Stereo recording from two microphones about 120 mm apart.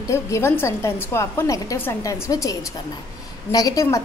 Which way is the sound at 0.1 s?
20° left (ahead or behind).